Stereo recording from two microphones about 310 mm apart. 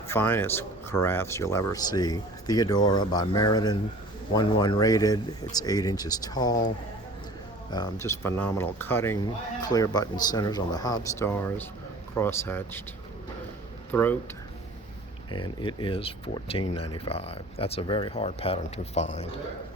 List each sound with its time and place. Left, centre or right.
0.1 s speech: centre
7.7 s speech: centre
13.9 s speech: centre
15.3 s speech: centre